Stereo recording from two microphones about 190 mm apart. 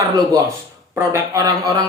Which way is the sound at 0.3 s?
15° right (ahead or behind).